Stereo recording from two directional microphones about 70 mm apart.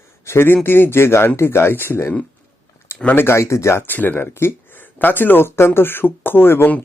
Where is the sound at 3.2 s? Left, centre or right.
Left.